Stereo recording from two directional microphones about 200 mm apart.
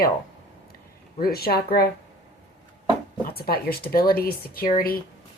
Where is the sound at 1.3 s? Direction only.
50° left (ahead or behind).